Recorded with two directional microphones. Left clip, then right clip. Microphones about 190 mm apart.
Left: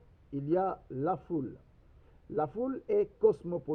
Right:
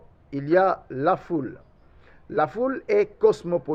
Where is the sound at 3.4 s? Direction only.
35° right (ahead or behind).